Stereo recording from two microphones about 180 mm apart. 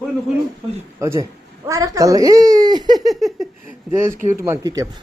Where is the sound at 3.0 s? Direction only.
Centre (ahead or behind).